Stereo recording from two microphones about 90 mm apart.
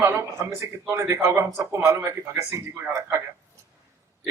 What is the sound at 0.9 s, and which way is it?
A man's voice, 35° right (ahead or behind).